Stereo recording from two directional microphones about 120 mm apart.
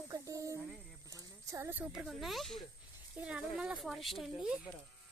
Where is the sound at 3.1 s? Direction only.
10° right (ahead or behind).